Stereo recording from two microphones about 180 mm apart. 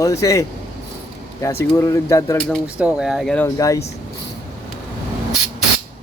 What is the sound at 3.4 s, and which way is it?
Speech, 20° left (ahead or behind).